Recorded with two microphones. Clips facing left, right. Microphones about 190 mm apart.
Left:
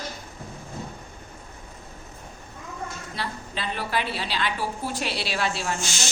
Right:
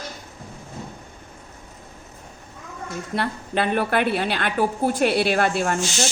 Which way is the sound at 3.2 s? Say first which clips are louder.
Right 9 dB; 55° right (ahead or behind).